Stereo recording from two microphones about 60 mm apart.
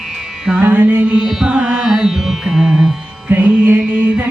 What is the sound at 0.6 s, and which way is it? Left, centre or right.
Carnatic music, right.